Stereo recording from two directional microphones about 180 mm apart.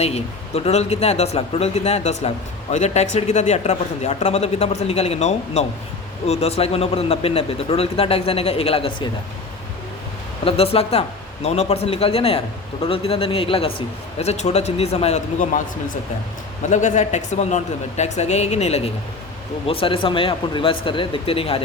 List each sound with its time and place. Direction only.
0.0 s speech: 35° left (ahead or behind)
10.4 s speech: 35° left (ahead or behind)
16.6 s speech: 40° left (ahead or behind)